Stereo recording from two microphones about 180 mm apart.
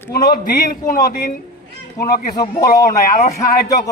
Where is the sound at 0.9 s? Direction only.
50° left (ahead or behind).